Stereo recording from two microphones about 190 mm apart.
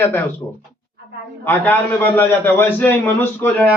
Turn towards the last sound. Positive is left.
turn(degrees=10)  # may be behind; listen again after turning